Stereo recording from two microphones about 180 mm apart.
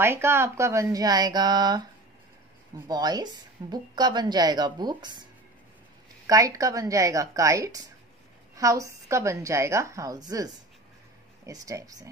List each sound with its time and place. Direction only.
0.0 s speech: 15° right (ahead or behind)
2.9 s speech: 20° right (ahead or behind)
6.2 s a woman's voice: 20° right (ahead or behind)